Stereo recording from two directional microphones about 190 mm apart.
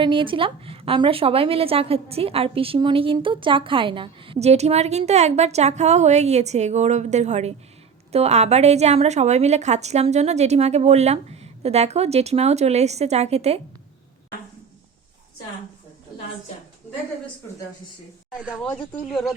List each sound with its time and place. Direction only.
0.0 s a woman's voice: 25° right (ahead or behind)
18.3 s speech: 5° right (ahead or behind)
18.6 s speech: 10° left (ahead or behind)